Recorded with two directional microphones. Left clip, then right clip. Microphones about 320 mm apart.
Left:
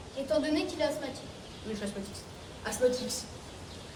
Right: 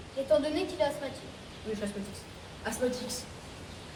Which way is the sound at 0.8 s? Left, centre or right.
Centre.